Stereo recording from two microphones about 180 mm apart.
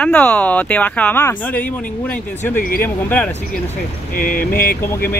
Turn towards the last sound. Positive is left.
turn(degrees=55)  # may be behind; listen again after turning